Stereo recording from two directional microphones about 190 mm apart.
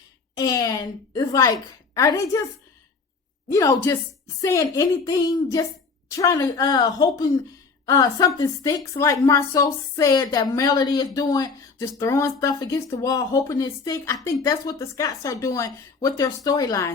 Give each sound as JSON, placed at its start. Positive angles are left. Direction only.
{"t": 0.3, "sound": "a woman's voice", "side_deg": 20}
{"t": 3.5, "sound": "a woman's voice", "side_deg": 15}